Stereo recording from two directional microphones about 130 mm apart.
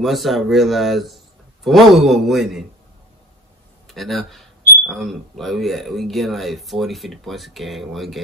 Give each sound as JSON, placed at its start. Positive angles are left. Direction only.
{"t": 0.0, "sound": "speech", "side_deg": 0}
{"t": 3.8, "sound": "speech", "side_deg": 0}